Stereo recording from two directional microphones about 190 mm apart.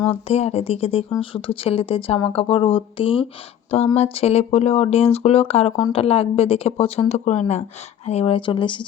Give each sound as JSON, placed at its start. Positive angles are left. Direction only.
{"t": 0.1, "sound": "speech", "side_deg": 35}
{"t": 5.7, "sound": "speech", "side_deg": 20}
{"t": 6.0, "sound": "speech", "side_deg": 30}